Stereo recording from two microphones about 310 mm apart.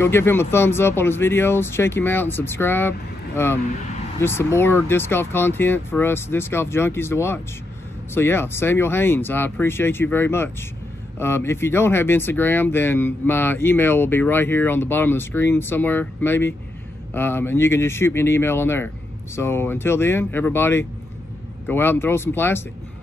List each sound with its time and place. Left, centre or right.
0.0 s speech: centre